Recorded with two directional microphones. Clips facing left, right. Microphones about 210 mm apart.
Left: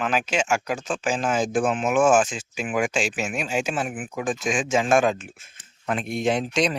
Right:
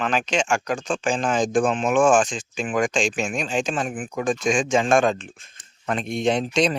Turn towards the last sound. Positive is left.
turn(degrees=0)  # may be behind; listen again after turning